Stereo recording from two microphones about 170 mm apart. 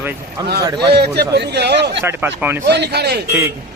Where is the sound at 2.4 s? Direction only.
15° right (ahead or behind).